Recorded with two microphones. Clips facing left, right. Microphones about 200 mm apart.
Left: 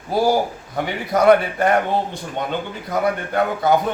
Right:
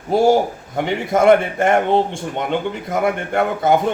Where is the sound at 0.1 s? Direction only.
25° right (ahead or behind).